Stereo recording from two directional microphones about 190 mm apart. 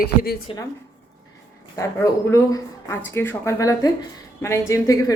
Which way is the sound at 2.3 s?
15° left (ahead or behind).